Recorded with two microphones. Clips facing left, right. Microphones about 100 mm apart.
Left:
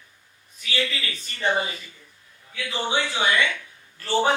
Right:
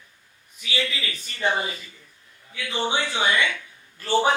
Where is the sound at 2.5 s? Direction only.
25° right (ahead or behind).